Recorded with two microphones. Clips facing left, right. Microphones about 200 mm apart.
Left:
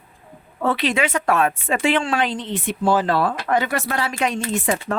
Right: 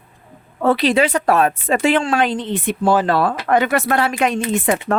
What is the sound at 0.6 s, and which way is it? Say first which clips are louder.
A woman's voice: right 5 dB; 35° right (ahead or behind).